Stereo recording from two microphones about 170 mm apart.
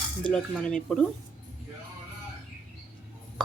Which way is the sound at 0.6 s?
5° left (ahead or behind).